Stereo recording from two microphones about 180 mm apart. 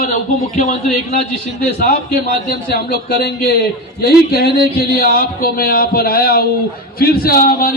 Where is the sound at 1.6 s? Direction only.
60° left (ahead or behind).